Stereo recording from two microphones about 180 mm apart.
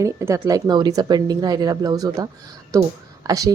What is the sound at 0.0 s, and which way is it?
Speech, 15° right (ahead or behind).